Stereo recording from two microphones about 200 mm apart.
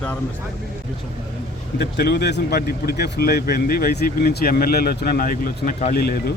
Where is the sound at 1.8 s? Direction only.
55° left (ahead or behind).